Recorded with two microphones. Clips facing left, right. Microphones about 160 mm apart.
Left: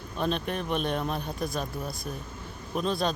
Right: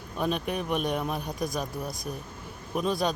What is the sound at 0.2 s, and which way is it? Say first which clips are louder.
Speech: right 1 dB; 10° right (ahead or behind).